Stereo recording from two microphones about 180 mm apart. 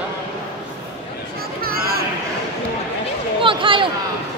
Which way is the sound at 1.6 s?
55° right (ahead or behind).